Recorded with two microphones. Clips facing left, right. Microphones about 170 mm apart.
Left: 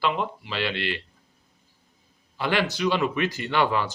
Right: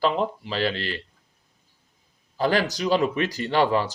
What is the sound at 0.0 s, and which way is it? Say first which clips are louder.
Speech: right 3 dB; 35° right (ahead or behind).